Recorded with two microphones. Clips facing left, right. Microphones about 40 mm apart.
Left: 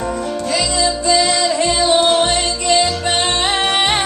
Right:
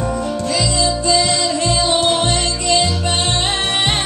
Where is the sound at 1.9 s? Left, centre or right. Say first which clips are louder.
Left 4 dB; centre.